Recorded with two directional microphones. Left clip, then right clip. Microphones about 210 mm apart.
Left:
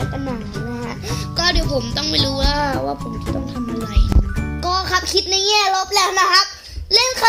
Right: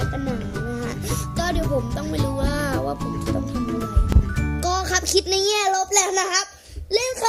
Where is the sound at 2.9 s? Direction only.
Centre (ahead or behind).